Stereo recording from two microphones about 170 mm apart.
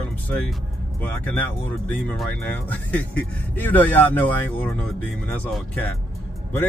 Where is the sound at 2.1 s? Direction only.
10° left (ahead or behind).